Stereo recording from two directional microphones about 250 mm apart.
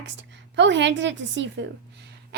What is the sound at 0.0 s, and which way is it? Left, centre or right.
A woman's voice, right.